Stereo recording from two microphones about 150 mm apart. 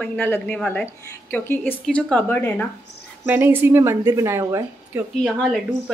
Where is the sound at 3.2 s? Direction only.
15° right (ahead or behind).